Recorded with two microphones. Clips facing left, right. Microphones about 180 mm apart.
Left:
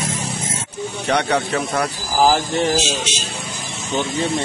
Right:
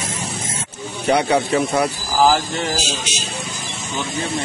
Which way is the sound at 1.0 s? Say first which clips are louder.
Right 3 dB; 10° right (ahead or behind).